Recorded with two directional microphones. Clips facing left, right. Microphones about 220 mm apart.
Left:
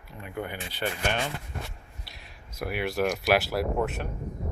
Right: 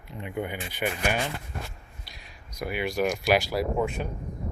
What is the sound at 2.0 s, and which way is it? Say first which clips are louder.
Speech: even; centre (ahead or behind).